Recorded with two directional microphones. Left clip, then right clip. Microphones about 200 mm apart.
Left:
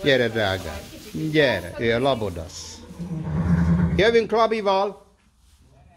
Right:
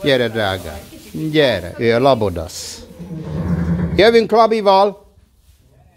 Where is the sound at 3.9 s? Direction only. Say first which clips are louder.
Right 8 dB; 40° right (ahead or behind).